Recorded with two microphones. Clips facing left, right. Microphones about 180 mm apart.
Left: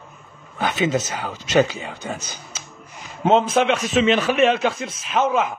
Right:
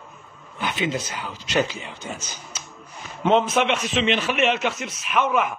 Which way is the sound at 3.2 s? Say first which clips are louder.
Left 2 dB; 35° left (ahead or behind).